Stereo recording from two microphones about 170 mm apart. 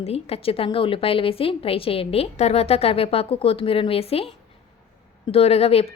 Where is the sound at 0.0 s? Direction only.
35° left (ahead or behind).